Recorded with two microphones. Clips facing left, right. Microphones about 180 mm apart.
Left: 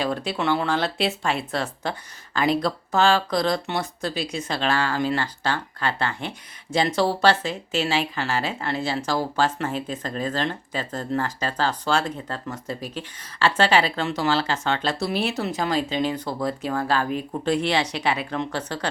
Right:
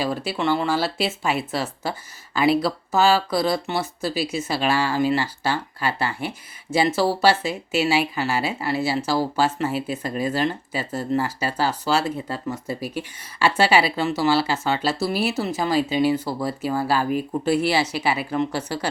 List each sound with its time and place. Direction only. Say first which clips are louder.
0.0 s speech: right 1 dB; 5° right (ahead or behind)